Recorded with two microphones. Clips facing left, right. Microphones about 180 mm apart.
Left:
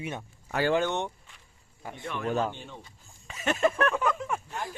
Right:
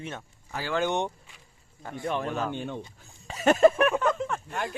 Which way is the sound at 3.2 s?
35° right (ahead or behind).